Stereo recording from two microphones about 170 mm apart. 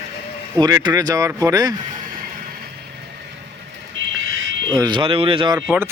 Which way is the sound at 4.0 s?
90° right.